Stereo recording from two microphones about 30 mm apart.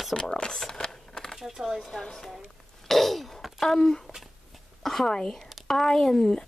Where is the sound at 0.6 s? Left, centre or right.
Left.